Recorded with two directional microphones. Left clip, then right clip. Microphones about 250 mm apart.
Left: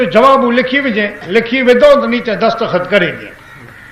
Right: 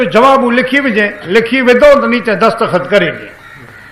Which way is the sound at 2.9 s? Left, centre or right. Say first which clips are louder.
Right 1 dB; right.